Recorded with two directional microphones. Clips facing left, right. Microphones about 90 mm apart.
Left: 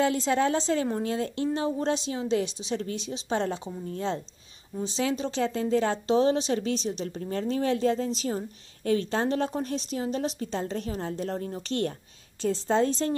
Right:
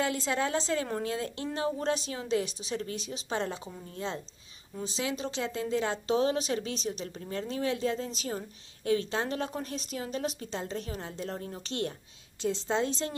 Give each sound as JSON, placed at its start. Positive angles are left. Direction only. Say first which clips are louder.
{"t": 0.0, "sound": "a woman's voice", "louder": "left 6 dB", "side_deg": 30}